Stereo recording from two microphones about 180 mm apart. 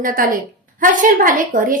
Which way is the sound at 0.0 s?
50° right (ahead or behind).